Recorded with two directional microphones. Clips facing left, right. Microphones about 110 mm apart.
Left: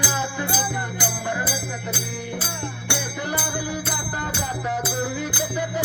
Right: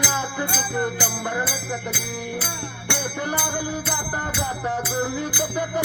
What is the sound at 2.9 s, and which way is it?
Music, 35° right (ahead or behind).